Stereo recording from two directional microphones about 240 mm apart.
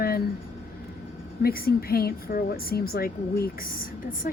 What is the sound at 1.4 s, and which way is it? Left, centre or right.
A woman's voice, left.